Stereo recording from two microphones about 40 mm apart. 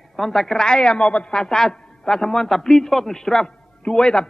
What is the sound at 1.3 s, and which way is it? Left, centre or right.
A man's voice, centre.